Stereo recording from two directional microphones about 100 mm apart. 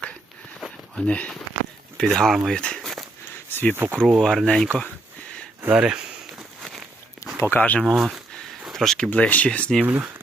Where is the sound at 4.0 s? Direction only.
5° left (ahead or behind).